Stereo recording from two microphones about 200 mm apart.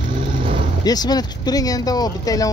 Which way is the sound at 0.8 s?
20° left (ahead or behind).